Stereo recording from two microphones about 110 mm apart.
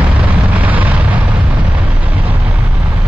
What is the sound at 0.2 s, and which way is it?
Eruption, 15° right (ahead or behind).